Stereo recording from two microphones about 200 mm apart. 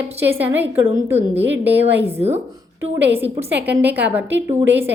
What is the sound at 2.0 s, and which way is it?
Speech, 30° right (ahead or behind).